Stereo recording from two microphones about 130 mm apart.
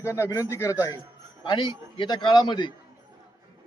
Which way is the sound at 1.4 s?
35° left (ahead or behind).